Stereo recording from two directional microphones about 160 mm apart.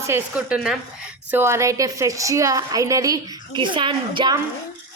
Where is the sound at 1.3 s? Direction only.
15° right (ahead or behind).